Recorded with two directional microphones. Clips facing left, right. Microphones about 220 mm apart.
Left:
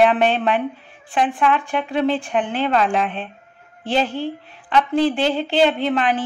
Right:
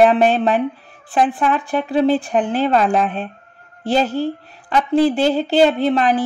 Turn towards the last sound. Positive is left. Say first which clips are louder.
# right 4 dB
turn(degrees=-40)  # may be behind; listen again after turning